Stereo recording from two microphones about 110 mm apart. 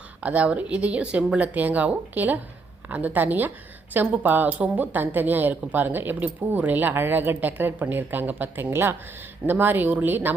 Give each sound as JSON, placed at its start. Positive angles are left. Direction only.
{"t": 0.2, "sound": "a woman's voice", "side_deg": -10}